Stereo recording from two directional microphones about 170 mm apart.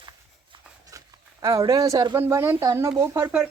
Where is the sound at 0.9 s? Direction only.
20° right (ahead or behind).